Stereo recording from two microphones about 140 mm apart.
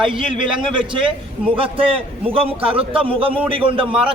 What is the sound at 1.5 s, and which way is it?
A man's voice, 40° right (ahead or behind).